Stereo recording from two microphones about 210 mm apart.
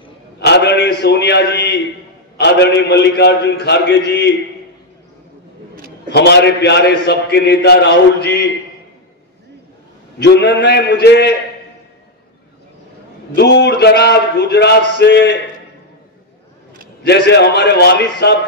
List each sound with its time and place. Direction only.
0.4 s a man's voice: 55° left (ahead or behind)
6.1 s a man's voice: 50° left (ahead or behind)
10.1 s a man's voice: 50° left (ahead or behind)
13.3 s a man's voice: 55° left (ahead or behind)
17.0 s a man's voice: 55° left (ahead or behind)